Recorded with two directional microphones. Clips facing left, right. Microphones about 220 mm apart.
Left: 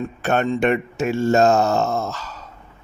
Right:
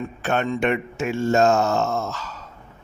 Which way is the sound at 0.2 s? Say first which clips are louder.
Left 3 dB; 40° left (ahead or behind).